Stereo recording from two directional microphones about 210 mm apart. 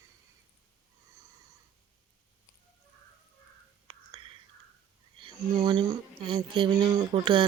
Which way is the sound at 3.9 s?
25° right (ahead or behind).